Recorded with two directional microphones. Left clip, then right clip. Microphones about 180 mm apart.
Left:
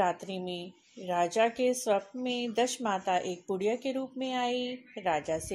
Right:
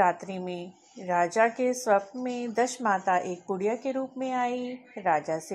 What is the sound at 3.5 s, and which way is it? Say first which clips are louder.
Speech: right 2 dB; centre (ahead or behind).